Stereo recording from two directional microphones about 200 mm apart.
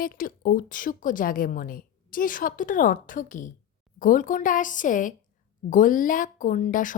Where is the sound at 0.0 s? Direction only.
45° left (ahead or behind).